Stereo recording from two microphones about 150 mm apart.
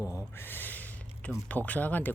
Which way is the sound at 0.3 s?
15° left (ahead or behind).